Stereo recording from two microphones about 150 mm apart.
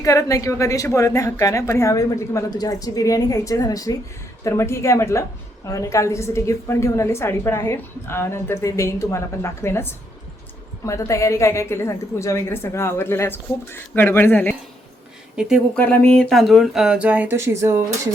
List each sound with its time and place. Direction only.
0.0 s a woman's voice: 20° left (ahead or behind)
15.4 s speech: 5° right (ahead or behind)
15.8 s speech: 10° left (ahead or behind); by 18.1 s 20° right (ahead or behind)